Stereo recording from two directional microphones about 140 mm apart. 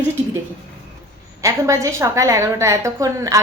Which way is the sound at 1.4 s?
20° right (ahead or behind).